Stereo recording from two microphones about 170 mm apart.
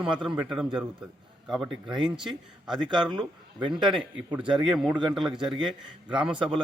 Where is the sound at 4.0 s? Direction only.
5° right (ahead or behind).